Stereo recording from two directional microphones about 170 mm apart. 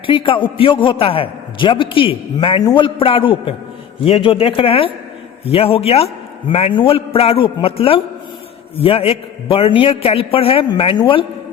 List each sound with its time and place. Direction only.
0.0 s a man's voice: 30° left (ahead or behind)